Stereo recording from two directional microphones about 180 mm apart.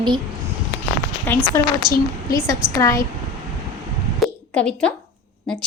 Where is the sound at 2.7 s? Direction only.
15° left (ahead or behind).